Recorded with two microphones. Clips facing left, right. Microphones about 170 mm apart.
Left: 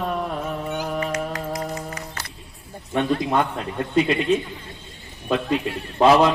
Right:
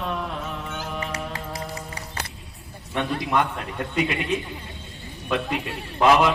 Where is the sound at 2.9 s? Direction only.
35° left (ahead or behind).